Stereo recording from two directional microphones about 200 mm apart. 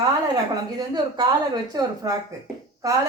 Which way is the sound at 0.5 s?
20° right (ahead or behind).